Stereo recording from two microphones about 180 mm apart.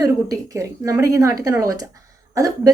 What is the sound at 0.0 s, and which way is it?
A woman's voice, 20° right (ahead or behind).